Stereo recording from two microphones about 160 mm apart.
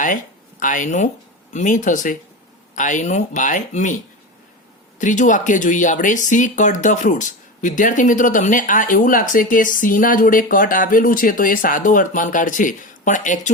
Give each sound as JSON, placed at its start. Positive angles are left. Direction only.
{"t": 0.6, "sound": "speech", "side_deg": 50}
{"t": 4.9, "sound": "speech", "side_deg": 55}